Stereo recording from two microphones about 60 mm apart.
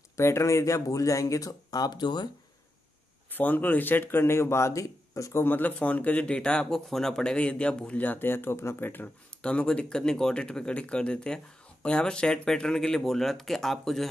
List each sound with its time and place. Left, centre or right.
0.2 s speech: left
3.3 s speech: left
5.3 s speech: left; by 6.6 s centre
6.6 s speech: centre
8.0 s speech: left
9.4 s speech: centre